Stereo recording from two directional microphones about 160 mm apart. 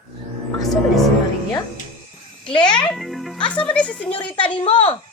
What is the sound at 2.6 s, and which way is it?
Music, 5° left (ahead or behind).